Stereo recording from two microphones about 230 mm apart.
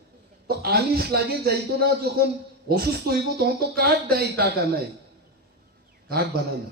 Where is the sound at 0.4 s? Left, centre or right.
Right.